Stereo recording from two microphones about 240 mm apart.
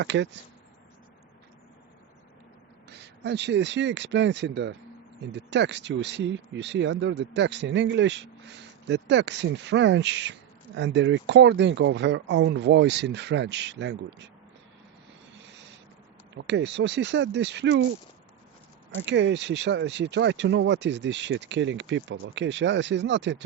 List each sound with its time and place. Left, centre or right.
0.0 s speech: right
2.9 s speech: right
16.3 s speech: right
19.0 s speech: right